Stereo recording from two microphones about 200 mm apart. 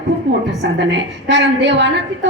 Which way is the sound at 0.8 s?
65° right (ahead or behind).